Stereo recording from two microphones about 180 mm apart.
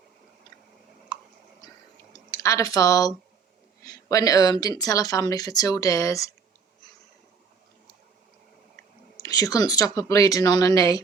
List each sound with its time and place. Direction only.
2.3 s speech: 15° left (ahead or behind)
8.7 s speech: 20° left (ahead or behind)